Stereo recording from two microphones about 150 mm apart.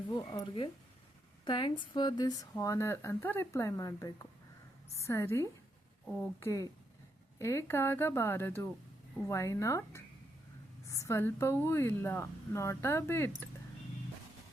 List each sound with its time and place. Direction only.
0.3 s a woman's voice: 30° left (ahead or behind)
6.1 s a woman's voice: 5° left (ahead or behind)
6.4 s a woman's voice: 20° left (ahead or behind)